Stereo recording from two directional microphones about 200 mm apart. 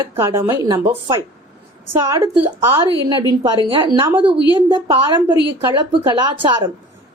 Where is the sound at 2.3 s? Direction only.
10° right (ahead or behind).